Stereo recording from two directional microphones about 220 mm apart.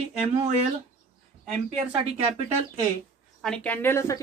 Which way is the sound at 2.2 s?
25° right (ahead or behind).